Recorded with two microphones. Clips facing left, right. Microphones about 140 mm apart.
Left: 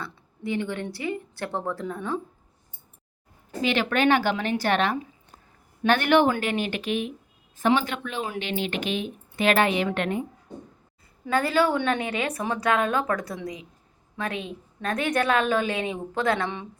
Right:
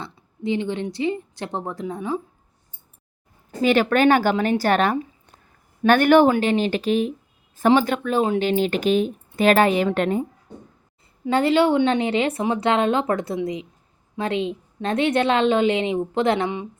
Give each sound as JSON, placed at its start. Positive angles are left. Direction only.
{"t": 0.0, "sound": "a woman's voice", "side_deg": -20}
{"t": 3.6, "sound": "a woman's voice", "side_deg": -45}
{"t": 6.3, "sound": "a woman's voice", "side_deg": -30}
{"t": 11.3, "sound": "a woman's voice", "side_deg": -25}